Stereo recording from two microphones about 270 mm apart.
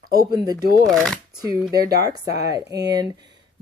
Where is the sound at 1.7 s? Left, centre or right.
Right.